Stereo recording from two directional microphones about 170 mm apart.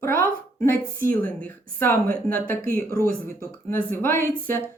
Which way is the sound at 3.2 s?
15° left (ahead or behind).